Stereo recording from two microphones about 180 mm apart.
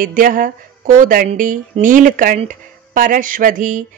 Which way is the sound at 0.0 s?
50° right (ahead or behind).